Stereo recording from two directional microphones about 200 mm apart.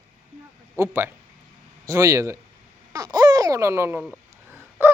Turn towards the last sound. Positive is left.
turn(degrees=-10)  # may be behind; listen again after turning